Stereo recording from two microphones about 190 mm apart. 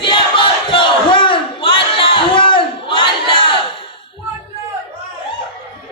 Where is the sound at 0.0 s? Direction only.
25° left (ahead or behind).